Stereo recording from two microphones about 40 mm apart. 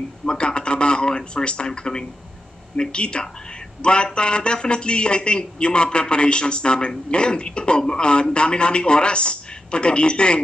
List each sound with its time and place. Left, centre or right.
0.2 s a man's voice: left